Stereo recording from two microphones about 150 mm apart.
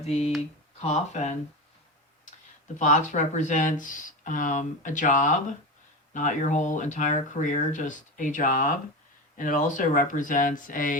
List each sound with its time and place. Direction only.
0.0 s speech: 45° left (ahead or behind)
2.7 s speech: 55° left (ahead or behind)